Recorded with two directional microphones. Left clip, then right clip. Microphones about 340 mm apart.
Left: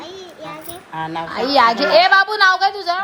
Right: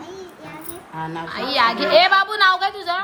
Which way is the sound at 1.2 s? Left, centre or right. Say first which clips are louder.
Left 5 dB; centre.